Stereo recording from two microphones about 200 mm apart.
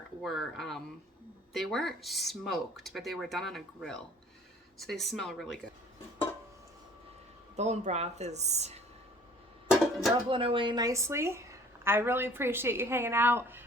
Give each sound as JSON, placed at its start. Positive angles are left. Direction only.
{"t": 0.2, "sound": "speech", "side_deg": 0}
{"t": 7.5, "sound": "a woman's voice", "side_deg": -35}
{"t": 9.8, "sound": "music", "side_deg": 0}
{"t": 10.2, "sound": "a woman's voice", "side_deg": -25}